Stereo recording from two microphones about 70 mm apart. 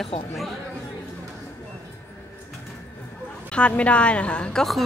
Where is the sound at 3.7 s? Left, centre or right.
Centre.